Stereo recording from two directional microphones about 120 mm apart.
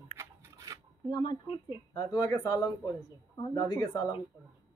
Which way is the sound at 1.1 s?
40° left (ahead or behind).